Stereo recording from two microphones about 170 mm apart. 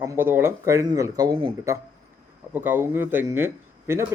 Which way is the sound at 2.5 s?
10° right (ahead or behind).